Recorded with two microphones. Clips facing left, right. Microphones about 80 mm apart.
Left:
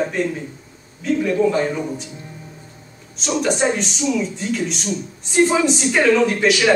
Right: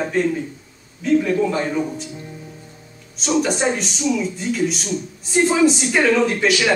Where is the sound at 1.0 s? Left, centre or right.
Centre.